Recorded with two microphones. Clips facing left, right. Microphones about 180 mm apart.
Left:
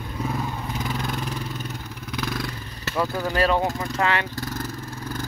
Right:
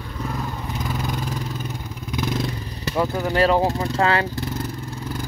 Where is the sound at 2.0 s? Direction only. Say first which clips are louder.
Right 5 dB; 20° right (ahead or behind).